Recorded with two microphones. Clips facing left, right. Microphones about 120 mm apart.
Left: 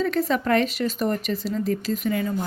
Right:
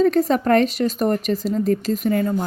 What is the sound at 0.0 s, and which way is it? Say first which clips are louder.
Speech: right 6 dB; 40° right (ahead or behind).